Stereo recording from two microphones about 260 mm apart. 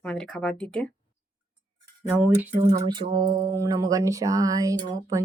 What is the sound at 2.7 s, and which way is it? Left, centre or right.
Speech, centre.